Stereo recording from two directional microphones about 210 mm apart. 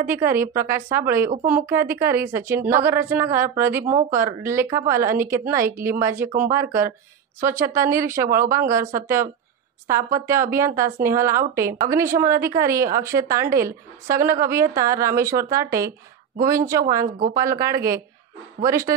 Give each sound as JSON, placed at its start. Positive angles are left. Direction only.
{"t": 0.0, "sound": "a woman's voice", "side_deg": -10}
{"t": 9.8, "sound": "a woman's voice", "side_deg": -15}
{"t": 17.0, "sound": "a woman's voice", "side_deg": -40}
{"t": 17.6, "sound": "a woman's voice", "side_deg": -15}